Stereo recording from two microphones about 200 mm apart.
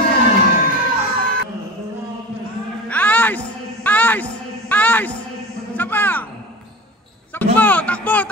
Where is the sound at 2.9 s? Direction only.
10° left (ahead or behind).